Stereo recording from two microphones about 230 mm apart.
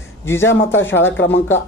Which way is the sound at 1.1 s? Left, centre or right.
Left.